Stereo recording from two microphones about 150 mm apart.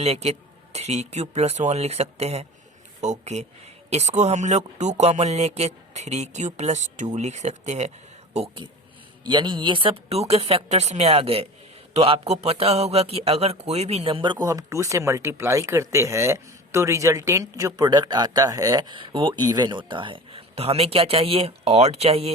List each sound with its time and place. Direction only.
0.0 s speech: 45° right (ahead or behind)
9.2 s a man's voice: 30° right (ahead or behind)